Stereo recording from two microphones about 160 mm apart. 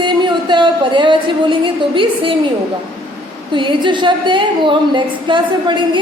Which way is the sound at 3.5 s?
30° right (ahead or behind).